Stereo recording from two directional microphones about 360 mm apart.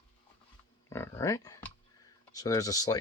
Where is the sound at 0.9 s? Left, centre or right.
Centre.